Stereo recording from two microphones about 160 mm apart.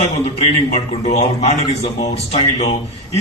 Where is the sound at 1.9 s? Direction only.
40° left (ahead or behind).